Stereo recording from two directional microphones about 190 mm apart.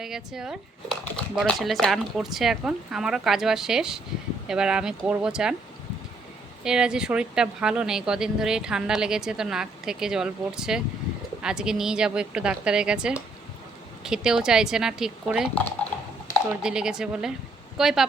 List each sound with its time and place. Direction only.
0.0 s a woman's voice: centre (ahead or behind)
6.7 s a woman's voice: 5° right (ahead or behind)
16.6 s a woman's voice: 5° right (ahead or behind)